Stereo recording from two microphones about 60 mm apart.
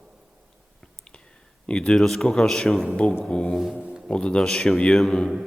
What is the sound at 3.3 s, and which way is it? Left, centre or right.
A man's voice, centre.